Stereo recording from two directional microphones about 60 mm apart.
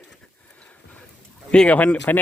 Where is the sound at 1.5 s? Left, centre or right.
Centre.